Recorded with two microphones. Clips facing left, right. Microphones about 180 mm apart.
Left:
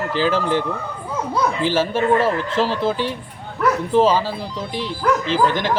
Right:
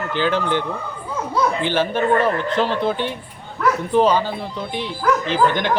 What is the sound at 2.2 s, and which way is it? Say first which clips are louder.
Speech: even; 30° left (ahead or behind).